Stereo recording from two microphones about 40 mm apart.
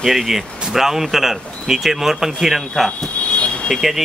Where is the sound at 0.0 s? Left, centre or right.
Centre.